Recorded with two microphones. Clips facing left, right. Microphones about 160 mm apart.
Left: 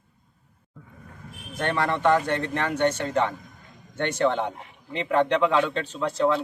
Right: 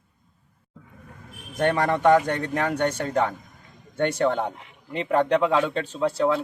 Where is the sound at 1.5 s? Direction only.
15° right (ahead or behind).